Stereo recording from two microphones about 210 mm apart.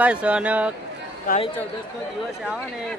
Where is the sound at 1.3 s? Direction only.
45° left (ahead or behind).